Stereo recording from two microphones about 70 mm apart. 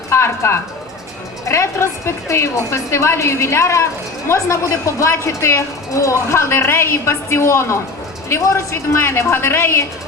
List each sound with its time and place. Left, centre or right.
0.1 s a woman's voice: left